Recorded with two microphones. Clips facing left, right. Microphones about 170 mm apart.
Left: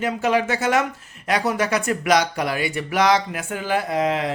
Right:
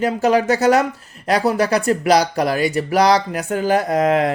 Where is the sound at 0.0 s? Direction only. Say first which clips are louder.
Right 4 dB; 35° right (ahead or behind).